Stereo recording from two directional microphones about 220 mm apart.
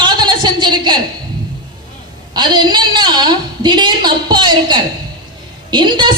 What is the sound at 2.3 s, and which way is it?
A woman's voice, 20° right (ahead or behind).